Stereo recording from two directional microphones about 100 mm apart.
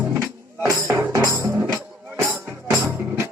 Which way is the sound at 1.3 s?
30° right (ahead or behind).